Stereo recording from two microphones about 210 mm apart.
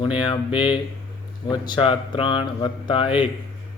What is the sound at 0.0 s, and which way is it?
Speech, 25° left (ahead or behind).